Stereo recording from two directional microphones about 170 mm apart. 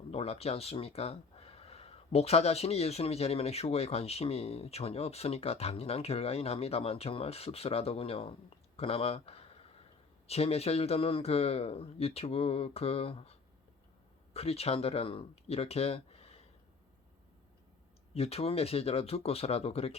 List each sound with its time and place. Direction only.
0.1 s speech: 35° left (ahead or behind)
14.3 s speech: 35° left (ahead or behind)
18.1 s speech: 35° left (ahead or behind)